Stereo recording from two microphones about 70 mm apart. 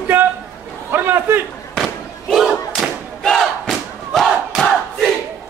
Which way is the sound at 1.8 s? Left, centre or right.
Centre.